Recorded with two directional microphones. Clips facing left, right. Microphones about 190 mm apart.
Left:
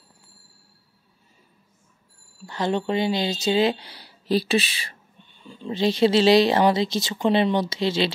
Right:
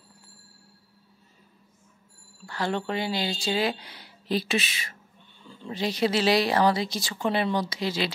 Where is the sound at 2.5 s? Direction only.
20° left (ahead or behind).